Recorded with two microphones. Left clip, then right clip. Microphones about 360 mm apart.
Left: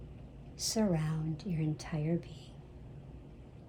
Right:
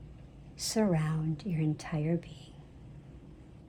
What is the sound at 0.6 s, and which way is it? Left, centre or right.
Speech, right.